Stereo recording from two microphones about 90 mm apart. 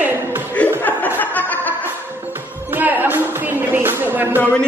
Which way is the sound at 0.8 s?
20° left (ahead or behind).